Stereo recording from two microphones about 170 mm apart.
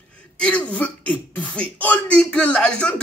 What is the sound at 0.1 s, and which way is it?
Speech, 5° left (ahead or behind).